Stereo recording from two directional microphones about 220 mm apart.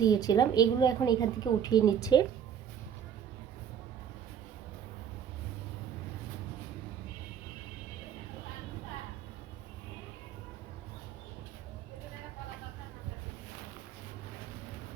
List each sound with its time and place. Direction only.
0.0 s a woman's voice: 15° left (ahead or behind)